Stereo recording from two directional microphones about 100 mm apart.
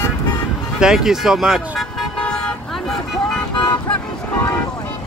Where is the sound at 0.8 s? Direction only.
5° right (ahead or behind).